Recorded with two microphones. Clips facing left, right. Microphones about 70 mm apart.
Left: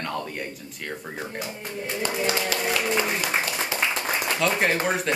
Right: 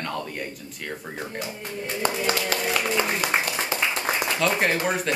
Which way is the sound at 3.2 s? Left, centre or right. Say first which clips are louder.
Right 1 dB; right.